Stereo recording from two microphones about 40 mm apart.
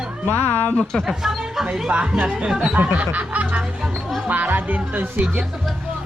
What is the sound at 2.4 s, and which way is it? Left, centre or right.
Speech, right.